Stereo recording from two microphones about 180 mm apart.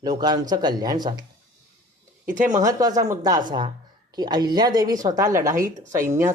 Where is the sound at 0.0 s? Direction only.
20° right (ahead or behind).